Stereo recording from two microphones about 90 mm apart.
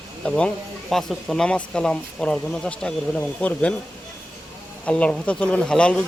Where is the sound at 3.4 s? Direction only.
10° left (ahead or behind).